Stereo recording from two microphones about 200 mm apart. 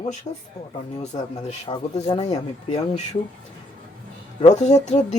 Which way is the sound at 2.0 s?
30° left (ahead or behind).